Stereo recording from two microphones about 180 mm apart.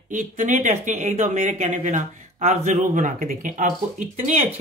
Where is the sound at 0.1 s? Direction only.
40° right (ahead or behind).